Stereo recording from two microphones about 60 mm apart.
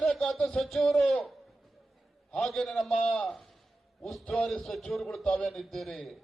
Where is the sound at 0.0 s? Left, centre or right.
Centre.